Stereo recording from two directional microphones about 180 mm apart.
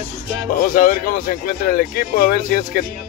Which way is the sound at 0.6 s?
50° left (ahead or behind).